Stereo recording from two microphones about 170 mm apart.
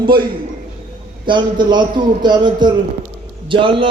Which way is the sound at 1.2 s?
25° right (ahead or behind).